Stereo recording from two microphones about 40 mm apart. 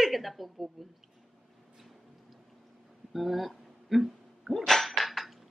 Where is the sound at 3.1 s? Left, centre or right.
Centre.